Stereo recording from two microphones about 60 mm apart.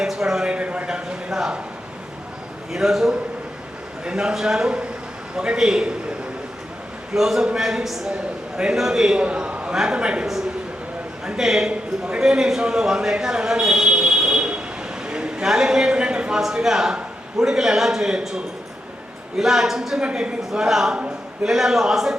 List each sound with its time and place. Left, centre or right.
0.0 s a sound: centre
2.7 s a man's voice: centre
7.1 s a man's voice: centre
8.5 s a man's voice: centre
11.3 s a man's voice: centre
15.0 s a sound: centre
16.4 s a man's voice: centre
19.4 s a man's voice: centre
20.0 s a man's voice: centre
20.5 s a man's voice: centre